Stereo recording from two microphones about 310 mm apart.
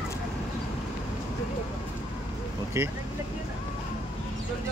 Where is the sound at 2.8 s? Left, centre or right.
Centre.